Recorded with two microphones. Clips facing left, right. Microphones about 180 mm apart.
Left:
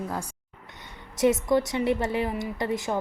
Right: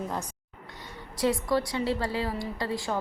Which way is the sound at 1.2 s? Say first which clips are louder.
Left 4 dB; 20° left (ahead or behind).